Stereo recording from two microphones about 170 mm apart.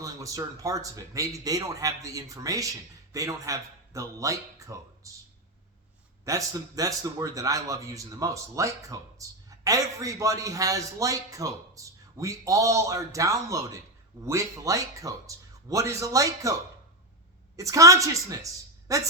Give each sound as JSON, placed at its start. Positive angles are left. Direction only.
{"t": 0.0, "sound": "a man's voice", "side_deg": -20}
{"t": 6.2, "sound": "a man's voice", "side_deg": -20}
{"t": 17.6, "sound": "a man's voice", "side_deg": -20}